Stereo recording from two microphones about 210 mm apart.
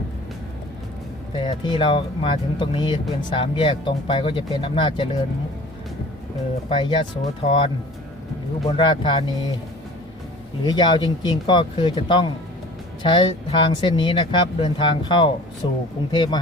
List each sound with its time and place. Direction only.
1.4 s speech: 20° left (ahead or behind)
6.7 s speech: 25° left (ahead or behind)
8.7 s speech: 20° left (ahead or behind)
10.6 s speech: 20° left (ahead or behind)